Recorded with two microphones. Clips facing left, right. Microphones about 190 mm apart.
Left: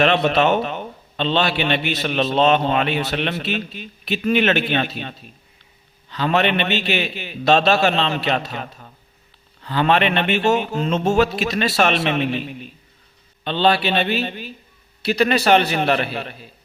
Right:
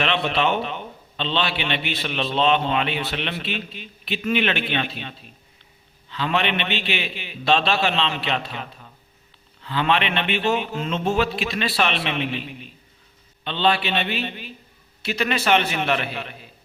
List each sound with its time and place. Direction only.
0.0 s a man's voice: 45° left (ahead or behind)